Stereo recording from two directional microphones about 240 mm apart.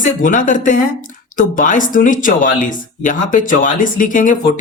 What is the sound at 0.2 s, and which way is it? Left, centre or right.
Speech, left.